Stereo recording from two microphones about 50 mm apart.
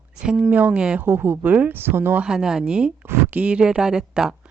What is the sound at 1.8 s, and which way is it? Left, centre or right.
Speech, right.